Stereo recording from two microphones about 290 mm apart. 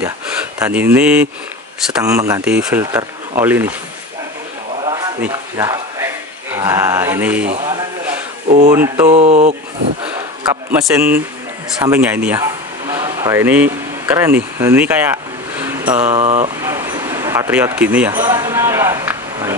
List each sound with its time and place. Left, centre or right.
0.6 s speech: centre
4.8 s a sound: centre
8.5 s speech: right
8.7 s speech: centre
9.1 s speech: right
10.0 s speech: centre
16.1 s speech: right
16.4 s speech: centre